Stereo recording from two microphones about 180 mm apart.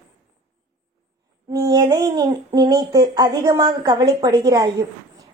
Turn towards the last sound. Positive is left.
turn(degrees=-20)  # may be behind; listen again after turning